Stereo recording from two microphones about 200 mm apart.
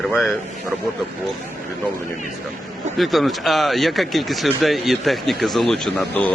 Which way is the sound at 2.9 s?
Centre (ahead or behind).